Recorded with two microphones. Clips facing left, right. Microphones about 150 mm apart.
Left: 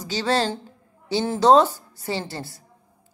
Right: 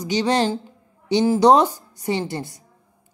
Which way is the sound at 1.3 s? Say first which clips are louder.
Even; 15° right (ahead or behind).